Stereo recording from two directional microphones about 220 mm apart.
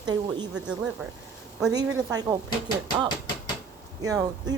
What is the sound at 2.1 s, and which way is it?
Speech, 15° right (ahead or behind).